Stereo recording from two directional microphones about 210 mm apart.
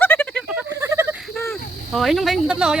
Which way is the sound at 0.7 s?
15° right (ahead or behind).